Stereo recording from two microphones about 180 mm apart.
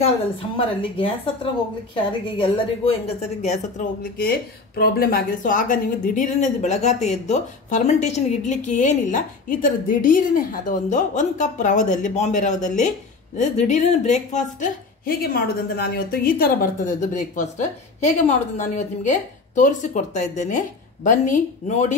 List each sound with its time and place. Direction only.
0.0 s a woman's voice: 30° left (ahead or behind)
4.2 s speech: 60° left (ahead or behind); by 21.9 s 40° left (ahead or behind)